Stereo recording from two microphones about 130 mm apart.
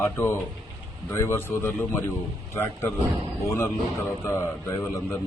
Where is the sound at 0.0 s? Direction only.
20° left (ahead or behind).